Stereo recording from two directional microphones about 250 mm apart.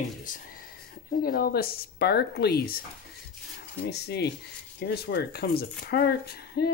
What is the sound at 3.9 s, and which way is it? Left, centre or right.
Speech, left.